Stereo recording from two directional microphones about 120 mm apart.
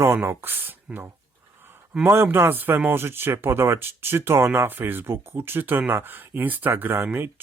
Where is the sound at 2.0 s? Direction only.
20° right (ahead or behind).